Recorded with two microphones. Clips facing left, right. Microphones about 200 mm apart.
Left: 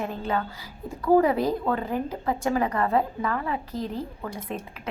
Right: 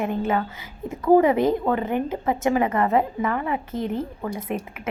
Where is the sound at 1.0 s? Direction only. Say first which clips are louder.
Right 3 dB; 20° right (ahead or behind).